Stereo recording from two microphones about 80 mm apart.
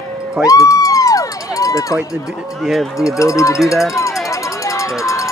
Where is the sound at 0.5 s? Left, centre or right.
Left.